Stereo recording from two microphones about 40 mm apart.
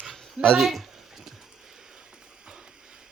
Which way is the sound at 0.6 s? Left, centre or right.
Centre.